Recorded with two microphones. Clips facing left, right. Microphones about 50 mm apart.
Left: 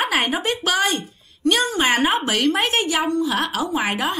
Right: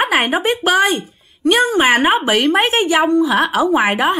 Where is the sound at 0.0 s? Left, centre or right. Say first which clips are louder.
Right 5 dB; right.